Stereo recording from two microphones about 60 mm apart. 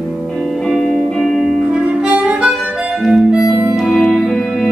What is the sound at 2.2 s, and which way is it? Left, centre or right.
Harmonica, centre.